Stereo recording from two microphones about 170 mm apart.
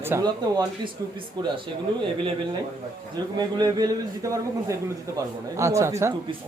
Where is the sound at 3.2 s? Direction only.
25° right (ahead or behind).